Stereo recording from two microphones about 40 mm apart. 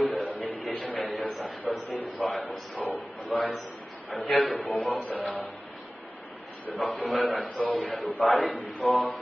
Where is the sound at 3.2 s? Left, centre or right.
Left.